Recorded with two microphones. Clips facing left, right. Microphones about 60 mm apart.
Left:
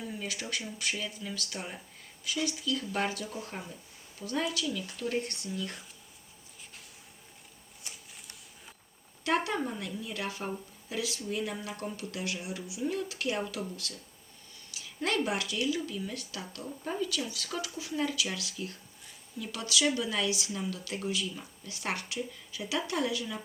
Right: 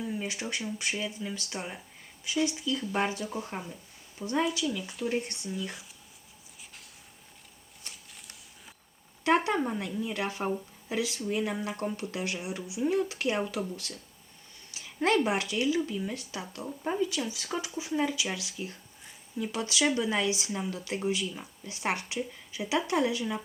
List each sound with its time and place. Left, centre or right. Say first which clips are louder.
0.0 s speech: right 4 dB; right
9.2 s a sound: right 4 dB; right
9.6 s speech: right 5 dB; right